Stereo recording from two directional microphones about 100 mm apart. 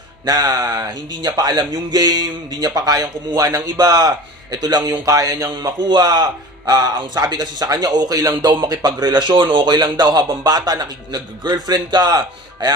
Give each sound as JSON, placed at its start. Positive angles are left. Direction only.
{"t": 0.5, "sound": "a man's voice", "side_deg": -40}